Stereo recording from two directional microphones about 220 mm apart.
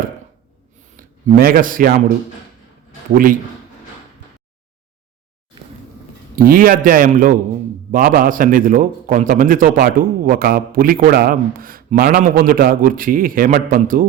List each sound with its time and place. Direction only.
0.9 s a man's voice: 40° right (ahead or behind)
6.3 s a man's voice: 40° right (ahead or behind)